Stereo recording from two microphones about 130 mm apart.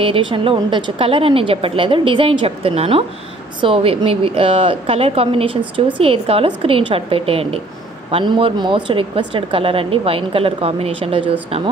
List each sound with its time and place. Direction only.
0.0 s a woman's voice: 40° right (ahead or behind)